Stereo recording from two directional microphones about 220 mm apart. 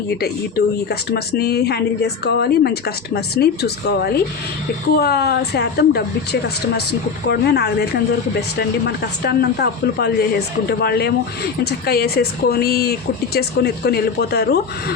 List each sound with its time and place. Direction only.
0.1 s speech: 45° left (ahead or behind)